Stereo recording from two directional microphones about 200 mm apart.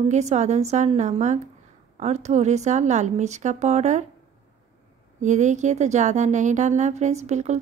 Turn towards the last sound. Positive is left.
turn(degrees=-35)  # may be behind; listen again after turning